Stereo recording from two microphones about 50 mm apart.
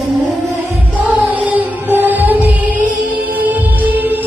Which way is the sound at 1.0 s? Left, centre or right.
Right.